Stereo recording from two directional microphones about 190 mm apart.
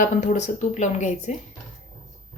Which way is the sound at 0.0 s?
40° left (ahead or behind).